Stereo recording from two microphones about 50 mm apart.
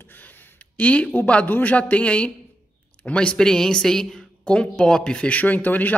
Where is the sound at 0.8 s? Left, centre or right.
Left; by 4.2 s centre.